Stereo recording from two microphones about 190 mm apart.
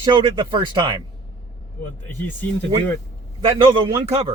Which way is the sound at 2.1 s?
10° left (ahead or behind).